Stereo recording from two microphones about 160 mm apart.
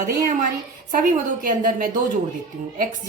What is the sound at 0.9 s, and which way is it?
A woman's voice, 60° right (ahead or behind).